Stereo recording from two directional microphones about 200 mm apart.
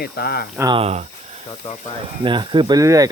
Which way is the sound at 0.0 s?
50° left (ahead or behind).